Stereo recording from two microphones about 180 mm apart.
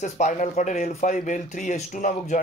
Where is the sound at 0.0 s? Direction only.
45° left (ahead or behind).